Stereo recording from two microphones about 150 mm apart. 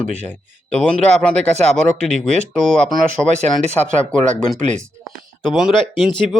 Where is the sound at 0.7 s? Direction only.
5° left (ahead or behind).